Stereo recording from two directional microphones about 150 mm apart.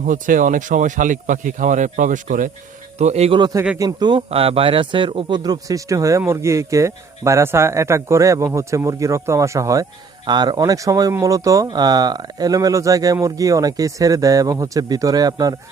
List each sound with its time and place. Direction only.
0.0 s speech: 60° right (ahead or behind)
3.0 s a man's voice: 45° right (ahead or behind)
3.3 s a man's voice: 25° right (ahead or behind)
4.3 s a man's voice: 40° right (ahead or behind)